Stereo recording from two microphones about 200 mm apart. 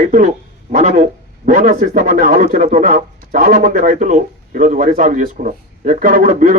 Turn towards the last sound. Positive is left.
turn(degrees=-40)  # may be behind; listen again after turning